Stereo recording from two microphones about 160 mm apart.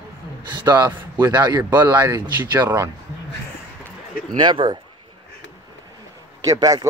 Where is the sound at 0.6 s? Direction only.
25° right (ahead or behind).